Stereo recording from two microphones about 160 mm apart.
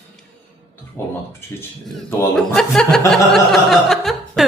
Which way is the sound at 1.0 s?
15° left (ahead or behind).